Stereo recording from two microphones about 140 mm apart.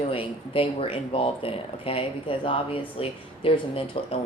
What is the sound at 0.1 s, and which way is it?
Speech, 40° left (ahead or behind).